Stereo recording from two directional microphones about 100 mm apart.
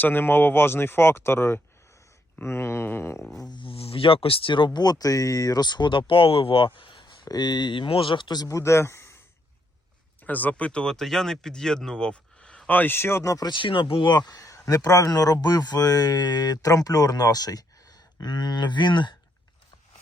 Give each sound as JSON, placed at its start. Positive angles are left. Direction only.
{"t": 0.0, "sound": "speech", "side_deg": 20}
{"t": 3.2, "sound": "speech", "side_deg": 5}
{"t": 3.5, "sound": "speech", "side_deg": 60}
{"t": 6.7, "sound": "a sound", "side_deg": 60}
{"t": 7.3, "sound": "speech", "side_deg": 45}
{"t": 8.5, "sound": "speech", "side_deg": 30}
{"t": 10.2, "sound": "speech", "side_deg": 15}
{"t": 13.5, "sound": "speech", "side_deg": 55}